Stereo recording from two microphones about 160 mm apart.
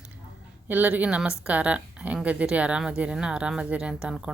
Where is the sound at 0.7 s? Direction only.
10° right (ahead or behind).